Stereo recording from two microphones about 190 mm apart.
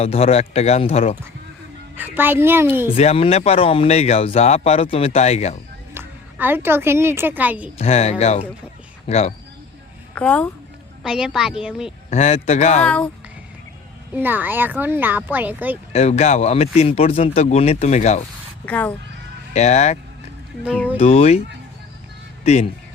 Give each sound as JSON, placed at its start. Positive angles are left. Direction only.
{"t": 0.0, "sound": "speech", "side_deg": 30}
{"t": 2.0, "sound": "speech", "side_deg": -10}
{"t": 2.9, "sound": "speech", "side_deg": 30}
{"t": 5.9, "sound": "a woman's voice", "side_deg": -10}
{"t": 7.8, "sound": "speech", "side_deg": 35}
{"t": 10.2, "sound": "speech", "side_deg": 5}
{"t": 11.0, "sound": "a woman's voice", "side_deg": -5}
{"t": 12.1, "sound": "speech", "side_deg": 35}
{"t": 12.8, "sound": "a woman's voice", "side_deg": 5}
{"t": 14.2, "sound": "speech", "side_deg": -10}
{"t": 15.9, "sound": "speech", "side_deg": 35}
{"t": 18.6, "sound": "speech", "side_deg": 10}
{"t": 19.5, "sound": "speech", "side_deg": 35}
{"t": 21.0, "sound": "speech", "side_deg": 35}